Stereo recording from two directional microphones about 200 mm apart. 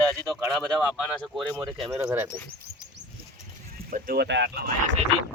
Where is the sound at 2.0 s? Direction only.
10° right (ahead or behind).